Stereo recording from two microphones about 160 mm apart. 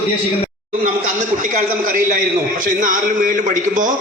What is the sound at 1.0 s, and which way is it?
A man's voice, 55° right (ahead or behind).